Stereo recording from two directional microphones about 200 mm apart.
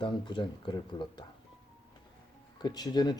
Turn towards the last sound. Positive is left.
turn(degrees=20)  # may be behind; listen again after turning